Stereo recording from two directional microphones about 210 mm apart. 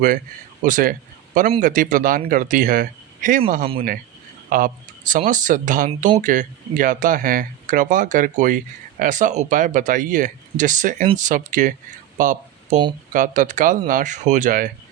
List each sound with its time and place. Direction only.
0.6 s a man's voice: 40° right (ahead or behind)
4.4 s speech: 40° right (ahead or behind)
12.1 s a sound: 40° right (ahead or behind)
13.1 s speech: 40° right (ahead or behind)